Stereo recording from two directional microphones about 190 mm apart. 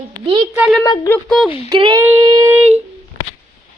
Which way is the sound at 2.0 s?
10° right (ahead or behind).